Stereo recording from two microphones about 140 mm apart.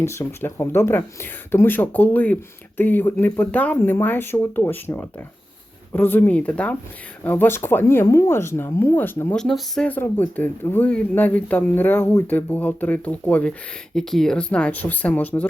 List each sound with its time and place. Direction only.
0.0 s speech: 20° left (ahead or behind)
9.3 s speech: 5° left (ahead or behind)